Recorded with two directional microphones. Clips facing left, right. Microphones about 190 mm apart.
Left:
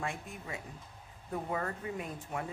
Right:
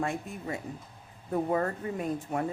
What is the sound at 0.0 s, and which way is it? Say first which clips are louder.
Speech: right 7 dB; 40° right (ahead or behind).